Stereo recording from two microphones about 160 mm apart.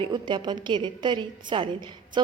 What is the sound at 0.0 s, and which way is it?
A woman's voice, 30° right (ahead or behind).